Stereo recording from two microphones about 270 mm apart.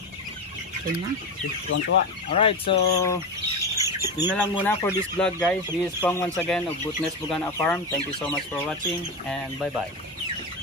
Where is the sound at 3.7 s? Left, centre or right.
Centre.